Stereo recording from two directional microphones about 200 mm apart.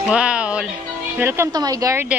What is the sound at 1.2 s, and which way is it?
Speech, 15° right (ahead or behind).